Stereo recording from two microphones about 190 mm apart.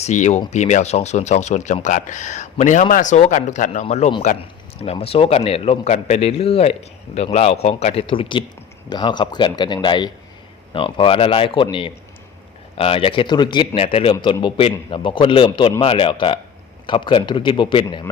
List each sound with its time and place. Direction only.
0.0 s a man's voice: 35° left (ahead or behind)